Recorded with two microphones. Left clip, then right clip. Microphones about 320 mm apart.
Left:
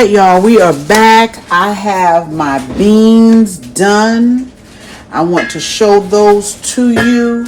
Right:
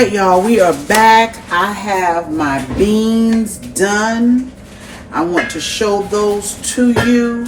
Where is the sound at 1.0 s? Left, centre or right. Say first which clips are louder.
Left 2 dB; left.